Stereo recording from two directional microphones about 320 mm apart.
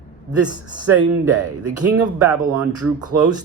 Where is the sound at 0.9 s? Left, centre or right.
Right.